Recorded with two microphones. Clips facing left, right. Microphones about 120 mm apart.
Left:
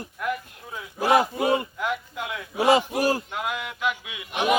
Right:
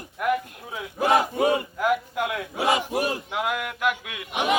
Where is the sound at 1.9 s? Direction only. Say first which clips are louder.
Right 6 dB; 60° right (ahead or behind).